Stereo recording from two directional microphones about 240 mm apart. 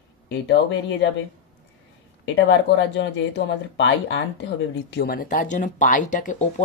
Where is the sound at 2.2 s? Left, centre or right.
Left.